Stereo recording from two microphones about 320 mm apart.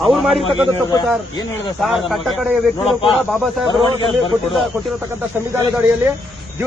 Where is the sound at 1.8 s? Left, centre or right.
Centre.